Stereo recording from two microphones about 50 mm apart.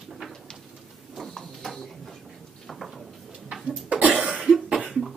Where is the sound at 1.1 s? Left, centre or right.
Centre.